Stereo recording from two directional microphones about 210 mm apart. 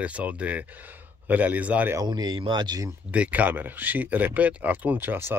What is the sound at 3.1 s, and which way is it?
Speech, 5° right (ahead or behind).